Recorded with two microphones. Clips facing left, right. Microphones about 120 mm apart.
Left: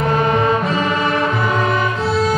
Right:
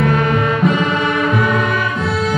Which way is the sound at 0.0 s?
30° left (ahead or behind).